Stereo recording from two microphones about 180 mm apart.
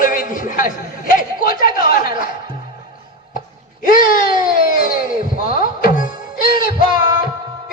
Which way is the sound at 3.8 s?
50° left (ahead or behind).